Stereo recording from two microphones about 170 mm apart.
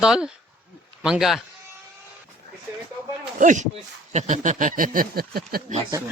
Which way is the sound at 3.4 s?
45° right (ahead or behind).